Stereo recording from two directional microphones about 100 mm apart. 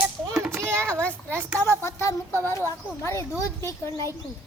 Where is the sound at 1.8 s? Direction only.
30° left (ahead or behind).